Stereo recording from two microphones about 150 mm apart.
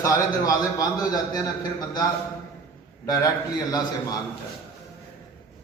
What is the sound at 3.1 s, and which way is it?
Speech, 25° left (ahead or behind).